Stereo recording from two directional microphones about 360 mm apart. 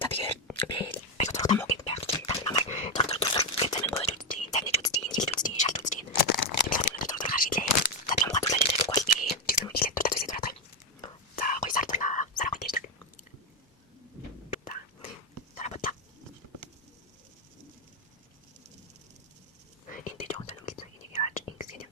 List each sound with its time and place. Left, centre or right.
0.0 s whispering: centre
6.2 s a sound: left
6.7 s whispering: left
11.3 s whispering: left
14.5 s whispering: left
15.5 s a sound: centre
19.9 s whispering: centre